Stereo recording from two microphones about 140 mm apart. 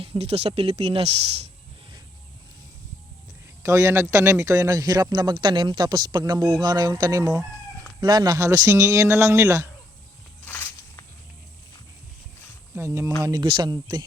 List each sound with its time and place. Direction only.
0.0 s speech: 45° right (ahead or behind)
3.6 s speech: 20° right (ahead or behind)
10.4 s a sound: 15° left (ahead or behind)
12.7 s speech: 20° right (ahead or behind)
13.2 s speech: 30° right (ahead or behind)